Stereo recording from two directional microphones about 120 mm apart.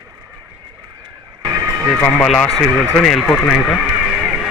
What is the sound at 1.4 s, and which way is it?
Vehicle, 35° right (ahead or behind).